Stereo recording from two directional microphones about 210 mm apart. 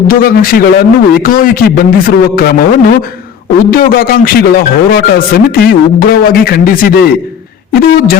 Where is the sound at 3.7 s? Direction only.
45° left (ahead or behind).